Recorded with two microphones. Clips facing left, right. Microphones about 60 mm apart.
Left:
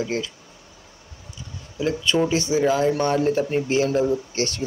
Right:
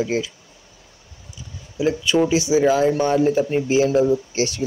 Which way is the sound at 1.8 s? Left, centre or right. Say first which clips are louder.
Right 3 dB; centre.